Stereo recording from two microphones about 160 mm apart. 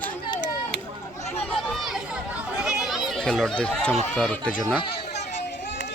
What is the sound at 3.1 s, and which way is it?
A man's voice, centre (ahead or behind).